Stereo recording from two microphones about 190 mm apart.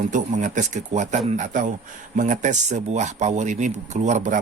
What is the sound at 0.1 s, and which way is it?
Speech, 40° right (ahead or behind).